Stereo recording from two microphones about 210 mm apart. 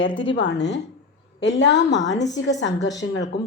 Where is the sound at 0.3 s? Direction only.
55° left (ahead or behind).